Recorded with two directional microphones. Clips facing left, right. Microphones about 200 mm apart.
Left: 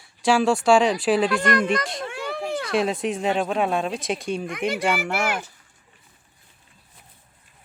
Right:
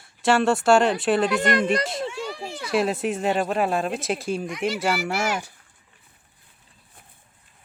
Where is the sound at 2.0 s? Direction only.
60° left (ahead or behind).